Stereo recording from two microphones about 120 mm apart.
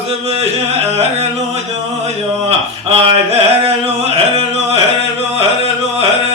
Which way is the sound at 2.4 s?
55° right (ahead or behind).